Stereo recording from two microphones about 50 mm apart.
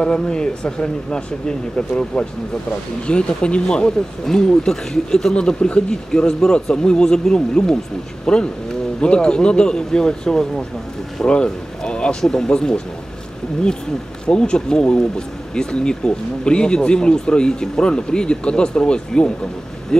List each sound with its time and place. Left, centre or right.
0.0 s speech: centre
14.2 s speech: centre